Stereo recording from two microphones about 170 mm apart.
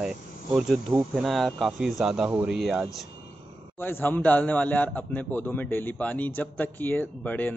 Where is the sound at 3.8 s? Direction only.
10° left (ahead or behind).